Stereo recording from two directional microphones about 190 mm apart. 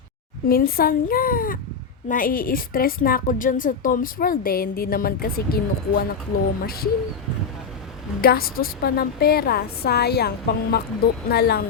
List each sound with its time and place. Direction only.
0.4 s a woman's voice: 50° left (ahead or behind)
8.2 s a woman's voice: 50° left (ahead or behind)